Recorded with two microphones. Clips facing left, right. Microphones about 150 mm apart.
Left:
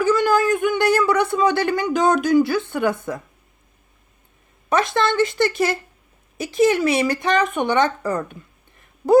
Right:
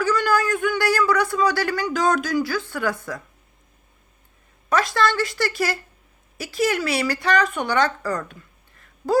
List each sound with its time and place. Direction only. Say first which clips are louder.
0.0 s speech: left 4 dB; 20° left (ahead or behind)
4.7 s a woman's voice: left 2 dB; 20° left (ahead or behind)